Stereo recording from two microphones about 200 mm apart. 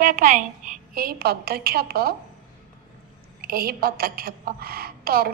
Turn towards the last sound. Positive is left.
turn(degrees=-50)  # may be behind; listen again after turning